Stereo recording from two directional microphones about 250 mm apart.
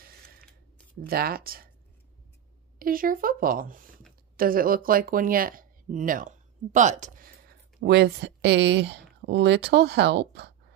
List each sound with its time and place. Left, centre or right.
1.0 s speech: right
2.8 s speech: right